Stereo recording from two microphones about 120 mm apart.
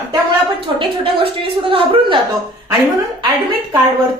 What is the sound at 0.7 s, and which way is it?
A woman's voice, 50° right (ahead or behind).